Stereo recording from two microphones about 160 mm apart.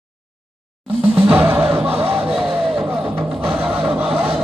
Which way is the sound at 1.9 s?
35° right (ahead or behind).